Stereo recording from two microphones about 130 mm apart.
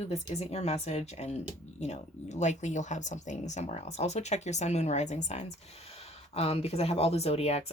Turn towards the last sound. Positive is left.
turn(degrees=50)  # may be behind; listen again after turning